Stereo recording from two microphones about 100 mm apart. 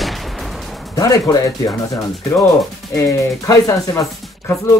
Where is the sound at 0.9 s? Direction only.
35° left (ahead or behind).